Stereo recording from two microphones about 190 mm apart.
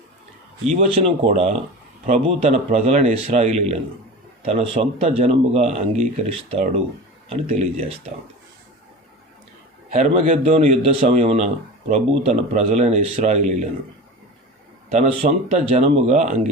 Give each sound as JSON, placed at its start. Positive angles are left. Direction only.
{"t": 0.6, "sound": "a man's voice", "side_deg": -35}
{"t": 9.9, "sound": "a man's voice", "side_deg": -35}
{"t": 14.9, "sound": "a man's voice", "side_deg": -30}